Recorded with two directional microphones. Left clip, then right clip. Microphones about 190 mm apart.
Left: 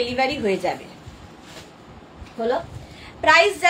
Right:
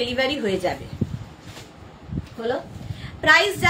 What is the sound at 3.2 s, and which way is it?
Speech, 25° right (ahead or behind).